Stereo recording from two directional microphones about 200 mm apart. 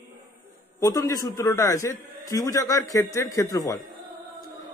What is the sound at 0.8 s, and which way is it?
Speech, 15° left (ahead or behind).